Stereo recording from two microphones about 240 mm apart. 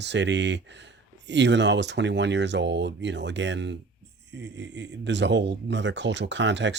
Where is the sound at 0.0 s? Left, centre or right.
Right.